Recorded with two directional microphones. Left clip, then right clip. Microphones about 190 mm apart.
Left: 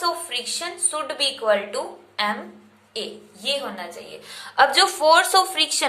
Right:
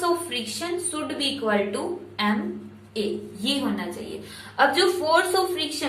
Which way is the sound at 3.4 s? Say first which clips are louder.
Left 1 dB; 35° left (ahead or behind).